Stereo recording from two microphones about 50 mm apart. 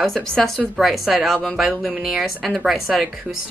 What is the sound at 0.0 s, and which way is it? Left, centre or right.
Speech, centre.